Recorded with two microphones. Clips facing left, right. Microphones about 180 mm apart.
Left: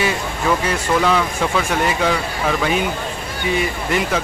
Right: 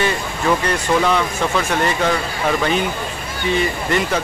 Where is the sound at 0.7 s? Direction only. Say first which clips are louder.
Even; centre (ahead or behind).